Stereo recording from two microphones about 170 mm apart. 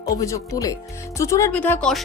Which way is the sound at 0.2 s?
20° left (ahead or behind).